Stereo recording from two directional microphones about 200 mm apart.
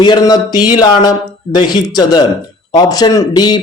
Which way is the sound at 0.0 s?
20° left (ahead or behind).